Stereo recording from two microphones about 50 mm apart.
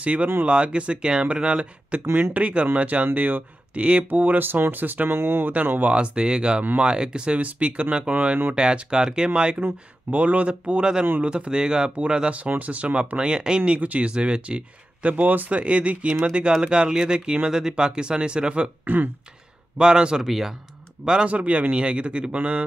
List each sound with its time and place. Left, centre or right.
0.0 s speech: right
5.1 s speech: right
5.7 s speech: right
5.9 s speech: centre
7.4 s speech: right
9.6 s speech: right; by 13.6 s centre
13.6 s speech: right
15.6 s speech: right
19.8 s speech: centre
20.2 s speech: centre
21.0 s speech: centre